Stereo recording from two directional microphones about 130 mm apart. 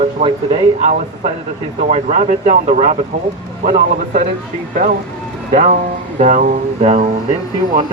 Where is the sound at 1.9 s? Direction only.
60° right (ahead or behind).